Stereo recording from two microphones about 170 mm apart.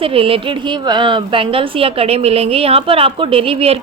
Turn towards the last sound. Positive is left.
turn(degrees=-35)  # may be behind; listen again after turning